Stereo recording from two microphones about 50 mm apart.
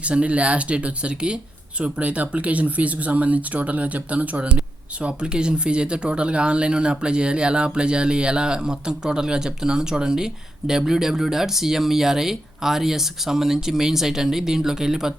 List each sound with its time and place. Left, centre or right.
0.0 s speech: right